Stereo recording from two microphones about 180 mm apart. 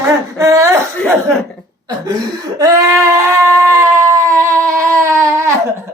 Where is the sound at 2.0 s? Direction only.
20° right (ahead or behind).